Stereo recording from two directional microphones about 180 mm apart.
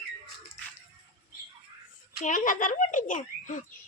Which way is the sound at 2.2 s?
45° left (ahead or behind).